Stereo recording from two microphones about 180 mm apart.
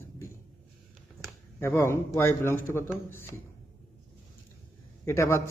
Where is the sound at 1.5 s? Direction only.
15° left (ahead or behind).